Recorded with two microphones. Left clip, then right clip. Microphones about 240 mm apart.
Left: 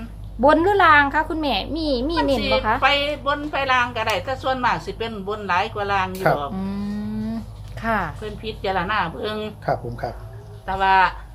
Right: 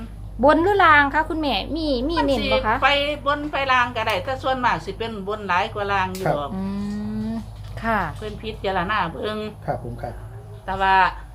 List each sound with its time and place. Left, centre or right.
0.4 s a woman's voice: centre
10.7 s a woman's voice: centre